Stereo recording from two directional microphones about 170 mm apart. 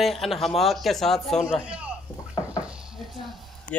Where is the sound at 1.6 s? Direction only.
10° right (ahead or behind).